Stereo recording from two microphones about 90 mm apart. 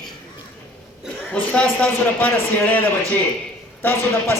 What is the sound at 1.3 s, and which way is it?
A man's voice, 15° left (ahead or behind).